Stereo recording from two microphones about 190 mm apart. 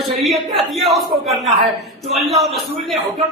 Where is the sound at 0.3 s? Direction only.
Centre (ahead or behind).